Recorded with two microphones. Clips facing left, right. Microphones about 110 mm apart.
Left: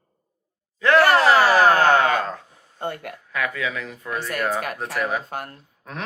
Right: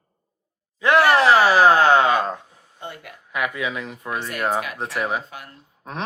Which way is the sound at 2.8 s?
55° left (ahead or behind).